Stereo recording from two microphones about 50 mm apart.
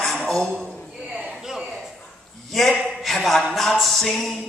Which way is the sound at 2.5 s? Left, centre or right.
Centre.